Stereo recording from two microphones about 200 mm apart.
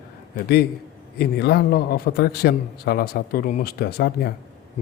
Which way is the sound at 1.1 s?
55° left (ahead or behind).